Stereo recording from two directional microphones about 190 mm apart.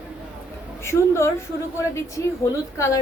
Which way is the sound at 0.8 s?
15° left (ahead or behind).